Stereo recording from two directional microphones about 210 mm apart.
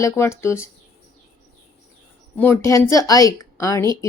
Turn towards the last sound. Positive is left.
turn(degrees=15)  # may be behind; listen again after turning